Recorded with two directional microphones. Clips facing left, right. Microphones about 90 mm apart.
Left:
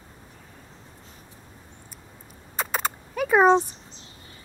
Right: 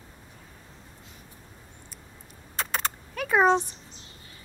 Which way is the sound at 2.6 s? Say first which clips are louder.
Left 3 dB; 5° left (ahead or behind).